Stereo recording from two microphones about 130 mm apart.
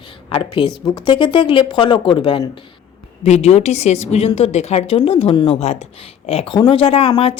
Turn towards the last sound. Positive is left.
turn(degrees=45)  # may be behind; listen again after turning